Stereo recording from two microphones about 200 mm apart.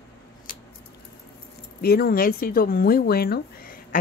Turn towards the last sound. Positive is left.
turn(degrees=45)  # may be behind; listen again after turning